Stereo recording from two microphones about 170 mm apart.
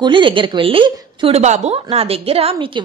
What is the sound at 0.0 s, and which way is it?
A woman's voice, 30° right (ahead or behind).